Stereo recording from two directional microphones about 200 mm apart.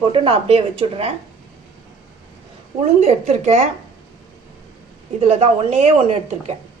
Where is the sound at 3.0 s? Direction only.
35° right (ahead or behind).